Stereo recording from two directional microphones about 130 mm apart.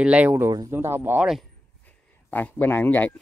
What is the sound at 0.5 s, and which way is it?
Speech, 30° right (ahead or behind).